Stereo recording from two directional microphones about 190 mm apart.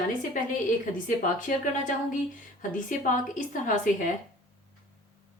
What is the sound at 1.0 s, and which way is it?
Speech, 45° left (ahead or behind).